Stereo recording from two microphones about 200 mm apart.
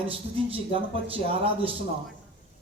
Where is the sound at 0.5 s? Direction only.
25° right (ahead or behind).